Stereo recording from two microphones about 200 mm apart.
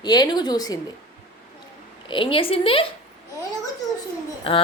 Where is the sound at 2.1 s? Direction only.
25° left (ahead or behind).